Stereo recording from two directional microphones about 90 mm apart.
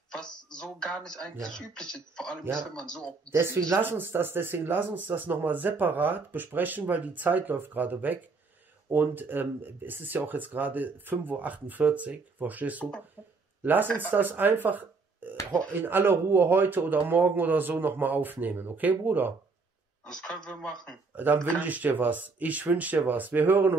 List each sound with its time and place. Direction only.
0.1 s speech: 10° left (ahead or behind)
3.3 s speech: 30° right (ahead or behind)
20.1 s speech: 5° left (ahead or behind)
21.5 s speech: 15° right (ahead or behind)